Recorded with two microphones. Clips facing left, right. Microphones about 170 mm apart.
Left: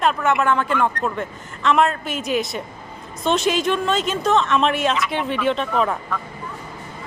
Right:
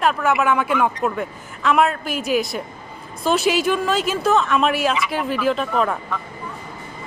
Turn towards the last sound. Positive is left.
turn(degrees=0)  # may be behind; listen again after turning